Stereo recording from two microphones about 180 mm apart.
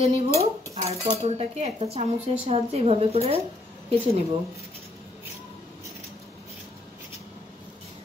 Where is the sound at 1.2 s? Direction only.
35° right (ahead or behind).